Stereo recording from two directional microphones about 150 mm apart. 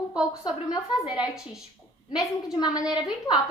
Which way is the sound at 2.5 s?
25° left (ahead or behind).